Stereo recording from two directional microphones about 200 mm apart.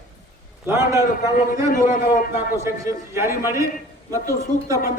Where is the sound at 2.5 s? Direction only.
15° right (ahead or behind).